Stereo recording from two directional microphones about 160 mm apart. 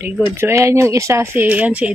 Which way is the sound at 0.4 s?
15° right (ahead or behind).